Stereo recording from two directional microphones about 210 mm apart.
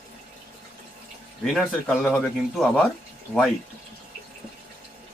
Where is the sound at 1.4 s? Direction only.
Centre (ahead or behind).